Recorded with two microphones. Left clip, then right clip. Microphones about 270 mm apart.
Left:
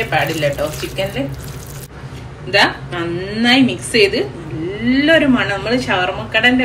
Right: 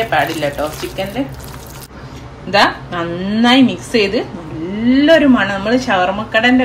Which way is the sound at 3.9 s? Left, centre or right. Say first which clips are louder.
Left 3 dB; right.